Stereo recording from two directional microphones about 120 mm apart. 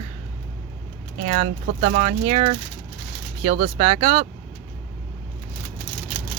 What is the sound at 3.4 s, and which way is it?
Speech, 55° right (ahead or behind).